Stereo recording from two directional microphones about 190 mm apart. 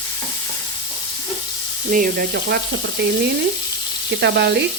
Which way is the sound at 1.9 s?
50° right (ahead or behind).